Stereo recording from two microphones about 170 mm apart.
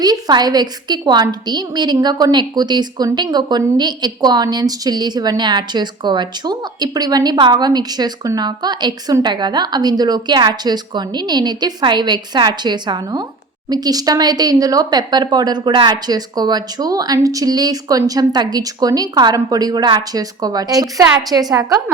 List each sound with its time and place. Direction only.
0.0 s a woman's voice: 25° right (ahead or behind)